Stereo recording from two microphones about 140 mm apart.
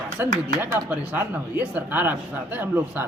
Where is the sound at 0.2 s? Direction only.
15° right (ahead or behind).